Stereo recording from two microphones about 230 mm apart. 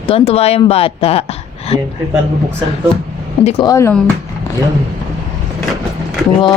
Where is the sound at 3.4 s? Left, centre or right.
Centre.